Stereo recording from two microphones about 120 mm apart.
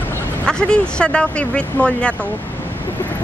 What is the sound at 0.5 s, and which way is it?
Speech, 5° left (ahead or behind).